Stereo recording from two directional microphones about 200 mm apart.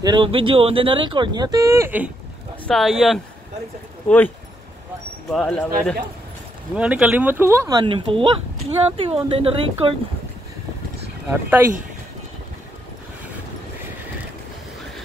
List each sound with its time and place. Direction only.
0.0 s speech: 25° right (ahead or behind)
2.6 s speech: centre (ahead or behind)
5.3 s speech: 5° left (ahead or behind); by 9.9 s 25° right (ahead or behind)
11.2 s speech: 10° right (ahead or behind)